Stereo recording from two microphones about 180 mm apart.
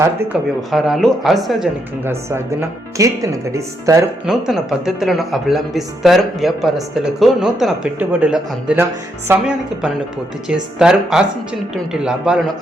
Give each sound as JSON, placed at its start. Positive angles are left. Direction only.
{"t": 0.7, "sound": "speech", "side_deg": 0}
{"t": 2.0, "sound": "speech", "side_deg": -15}
{"t": 4.3, "sound": "speech", "side_deg": 0}